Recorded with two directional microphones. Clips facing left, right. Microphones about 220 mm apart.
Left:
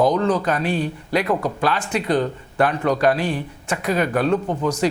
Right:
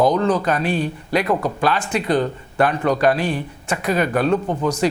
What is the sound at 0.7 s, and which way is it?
Speech, 45° right (ahead or behind).